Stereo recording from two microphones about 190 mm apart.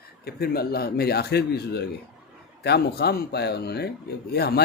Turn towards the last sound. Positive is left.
turn(degrees=60)  # may be behind; listen again after turning